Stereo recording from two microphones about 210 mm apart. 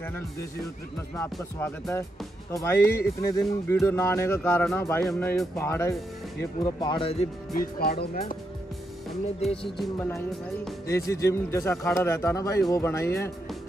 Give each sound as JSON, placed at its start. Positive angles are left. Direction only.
{"t": 1.1, "sound": "speech", "side_deg": 10}
{"t": 5.6, "sound": "speech", "side_deg": 15}
{"t": 7.5, "sound": "speech", "side_deg": 45}
{"t": 9.4, "sound": "speech", "side_deg": 30}
{"t": 9.9, "sound": "speech", "side_deg": 10}